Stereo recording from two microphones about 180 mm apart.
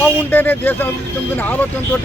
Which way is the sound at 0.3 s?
10° left (ahead or behind).